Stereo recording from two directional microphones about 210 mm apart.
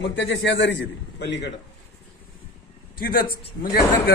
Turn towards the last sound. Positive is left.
turn(degrees=45)  # may be behind; listen again after turning